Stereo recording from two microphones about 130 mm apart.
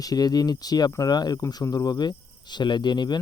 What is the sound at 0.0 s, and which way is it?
Speech, 30° left (ahead or behind).